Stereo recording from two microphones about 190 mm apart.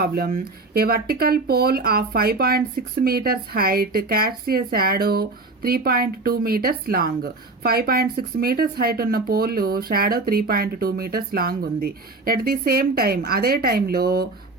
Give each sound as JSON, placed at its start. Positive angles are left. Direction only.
{"t": 0.0, "sound": "speech", "side_deg": -50}